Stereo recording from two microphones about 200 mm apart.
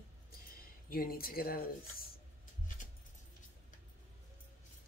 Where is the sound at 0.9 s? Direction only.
50° left (ahead or behind).